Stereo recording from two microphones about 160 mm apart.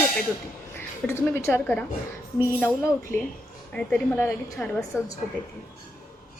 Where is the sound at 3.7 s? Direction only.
10° left (ahead or behind).